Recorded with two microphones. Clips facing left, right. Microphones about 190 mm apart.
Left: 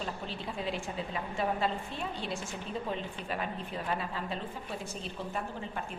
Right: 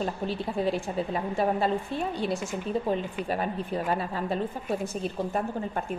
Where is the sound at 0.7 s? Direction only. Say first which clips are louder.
Right 8 dB; 40° right (ahead or behind).